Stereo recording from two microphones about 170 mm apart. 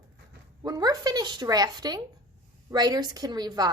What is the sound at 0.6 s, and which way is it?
A woman's voice, 20° right (ahead or behind).